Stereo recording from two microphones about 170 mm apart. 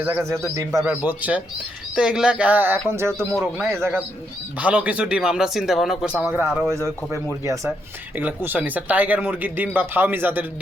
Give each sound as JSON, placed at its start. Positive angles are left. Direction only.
{"t": 0.0, "sound": "speech", "side_deg": -10}
{"t": 3.1, "sound": "speech", "side_deg": 5}
{"t": 3.4, "sound": "speech", "side_deg": -10}